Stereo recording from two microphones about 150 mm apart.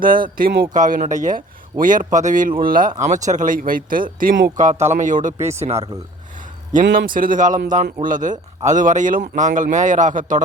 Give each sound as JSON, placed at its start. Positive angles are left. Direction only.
{"t": 0.0, "sound": "speech", "side_deg": -70}
{"t": 6.7, "sound": "speech", "side_deg": -70}
{"t": 8.0, "sound": "speech", "side_deg": -60}